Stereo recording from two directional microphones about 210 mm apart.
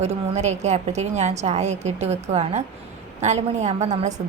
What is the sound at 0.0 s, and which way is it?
A woman's voice, 30° right (ahead or behind).